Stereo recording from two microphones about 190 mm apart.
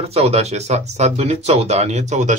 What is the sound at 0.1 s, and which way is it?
Speech, 35° right (ahead or behind).